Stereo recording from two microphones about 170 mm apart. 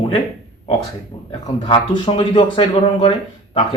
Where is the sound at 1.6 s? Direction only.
30° left (ahead or behind).